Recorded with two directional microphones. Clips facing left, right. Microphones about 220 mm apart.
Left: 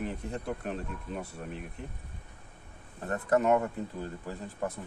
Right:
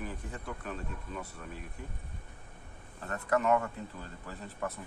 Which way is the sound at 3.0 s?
35° left (ahead or behind).